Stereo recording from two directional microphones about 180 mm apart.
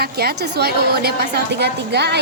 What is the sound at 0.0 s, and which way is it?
A woman's voice, 60° right (ahead or behind).